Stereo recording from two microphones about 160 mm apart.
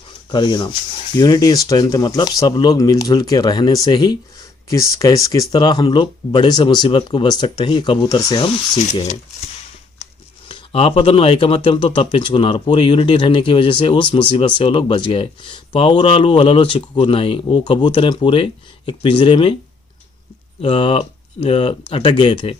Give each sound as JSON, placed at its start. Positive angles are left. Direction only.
{"t": 0.3, "sound": "speech", "side_deg": 30}
{"t": 10.5, "sound": "speech", "side_deg": 35}
{"t": 20.6, "sound": "speech", "side_deg": 35}